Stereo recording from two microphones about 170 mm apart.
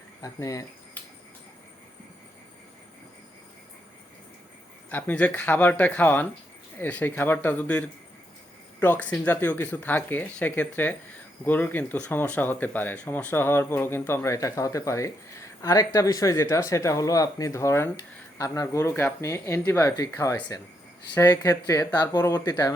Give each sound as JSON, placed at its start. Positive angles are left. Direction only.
{"t": 0.2, "sound": "speech", "side_deg": 20}
{"t": 4.9, "sound": "speech", "side_deg": 10}